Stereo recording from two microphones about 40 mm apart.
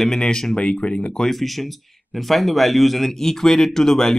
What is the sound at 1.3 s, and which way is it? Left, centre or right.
Speech, centre.